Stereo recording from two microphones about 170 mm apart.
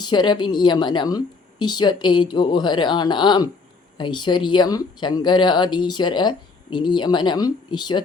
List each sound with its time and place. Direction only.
0.0 s speech: 25° left (ahead or behind)